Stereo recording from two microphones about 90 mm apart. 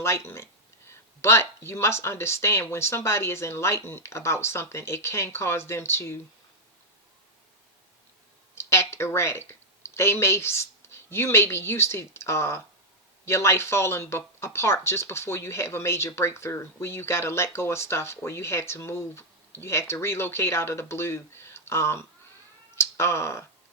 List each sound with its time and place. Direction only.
0.0 s speech: 30° left (ahead or behind)
8.5 s speech: 30° left (ahead or behind)